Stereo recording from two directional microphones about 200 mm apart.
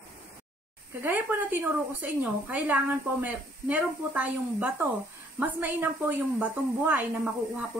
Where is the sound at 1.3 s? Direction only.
10° right (ahead or behind).